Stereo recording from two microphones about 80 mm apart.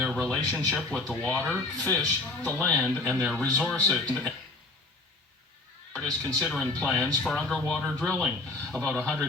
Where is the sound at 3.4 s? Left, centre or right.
Centre.